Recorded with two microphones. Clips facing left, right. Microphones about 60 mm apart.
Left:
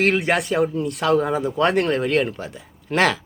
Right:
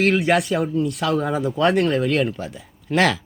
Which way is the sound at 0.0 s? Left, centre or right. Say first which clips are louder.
Right 1 dB; left.